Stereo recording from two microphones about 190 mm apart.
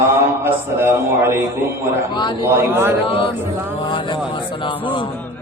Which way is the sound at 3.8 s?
25° left (ahead or behind).